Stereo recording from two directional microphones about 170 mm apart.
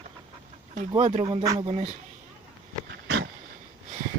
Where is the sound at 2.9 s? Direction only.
85° right.